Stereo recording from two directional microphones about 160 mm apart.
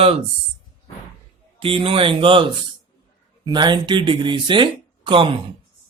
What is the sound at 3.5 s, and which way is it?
Speech, 30° right (ahead or behind).